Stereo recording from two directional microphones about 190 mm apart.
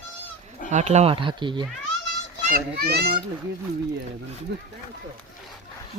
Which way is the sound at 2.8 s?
60° right (ahead or behind).